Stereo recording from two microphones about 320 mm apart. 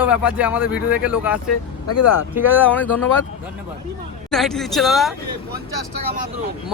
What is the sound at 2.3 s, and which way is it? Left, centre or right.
Speech, centre.